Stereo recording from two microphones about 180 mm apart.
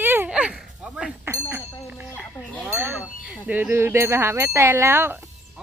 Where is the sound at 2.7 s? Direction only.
10° right (ahead or behind).